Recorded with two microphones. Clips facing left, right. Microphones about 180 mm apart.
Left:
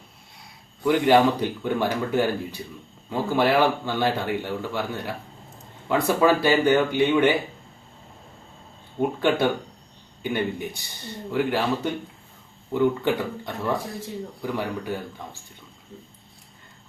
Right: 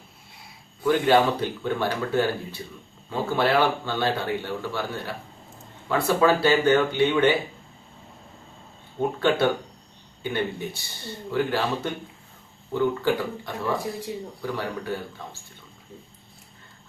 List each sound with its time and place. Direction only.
0.9 s speech: 15° left (ahead or behind)
9.0 s speech: 15° left (ahead or behind)